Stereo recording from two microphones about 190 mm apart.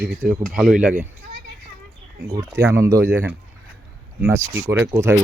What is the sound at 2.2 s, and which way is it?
Speech, 15° right (ahead or behind).